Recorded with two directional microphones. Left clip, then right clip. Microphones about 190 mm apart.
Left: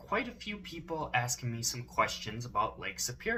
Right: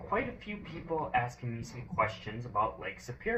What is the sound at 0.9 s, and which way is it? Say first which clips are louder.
Speech: right 2 dB; 30° left (ahead or behind).